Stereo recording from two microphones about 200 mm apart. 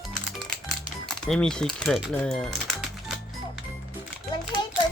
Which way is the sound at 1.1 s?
5° left (ahead or behind).